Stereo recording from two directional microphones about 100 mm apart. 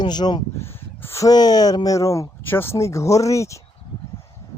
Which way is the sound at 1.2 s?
40° left (ahead or behind).